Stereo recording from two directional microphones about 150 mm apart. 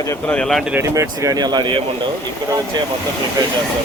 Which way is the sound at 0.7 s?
20° right (ahead or behind).